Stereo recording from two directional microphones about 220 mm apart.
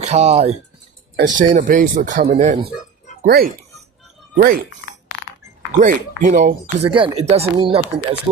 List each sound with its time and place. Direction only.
0.0 s speech: 30° right (ahead or behind)
3.2 s speech: 45° right (ahead or behind)
5.8 s speech: 35° right (ahead or behind)